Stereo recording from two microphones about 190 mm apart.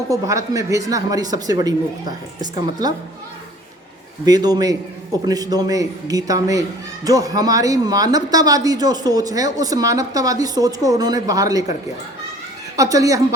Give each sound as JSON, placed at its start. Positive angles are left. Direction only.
{"t": 0.1, "sound": "speech", "side_deg": -15}
{"t": 4.3, "sound": "speech", "side_deg": -20}
{"t": 12.7, "sound": "a woman's voice", "side_deg": -15}